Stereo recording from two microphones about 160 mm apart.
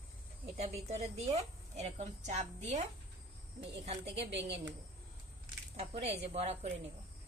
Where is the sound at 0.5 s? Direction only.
40° right (ahead or behind).